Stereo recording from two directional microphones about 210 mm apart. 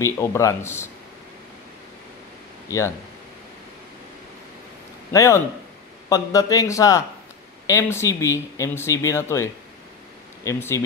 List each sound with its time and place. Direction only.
0.0 s speech: 15° left (ahead or behind)
5.1 s speech: 15° left (ahead or behind)